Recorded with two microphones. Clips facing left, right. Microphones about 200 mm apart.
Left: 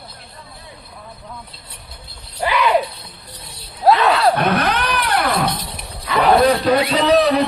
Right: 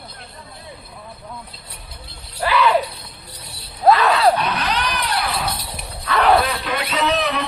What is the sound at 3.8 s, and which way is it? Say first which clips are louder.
Shatter: left 1 dB; centre (ahead or behind).